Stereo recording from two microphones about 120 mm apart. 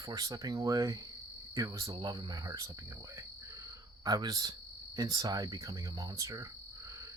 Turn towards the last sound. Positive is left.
turn(degrees=-25)  # may be behind; listen again after turning